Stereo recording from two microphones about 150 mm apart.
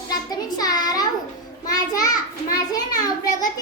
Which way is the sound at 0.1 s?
25° left (ahead or behind).